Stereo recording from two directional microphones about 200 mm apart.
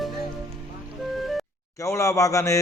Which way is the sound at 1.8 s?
15° left (ahead or behind).